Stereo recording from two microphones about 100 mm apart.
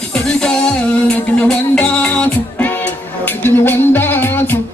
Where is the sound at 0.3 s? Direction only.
5° left (ahead or behind).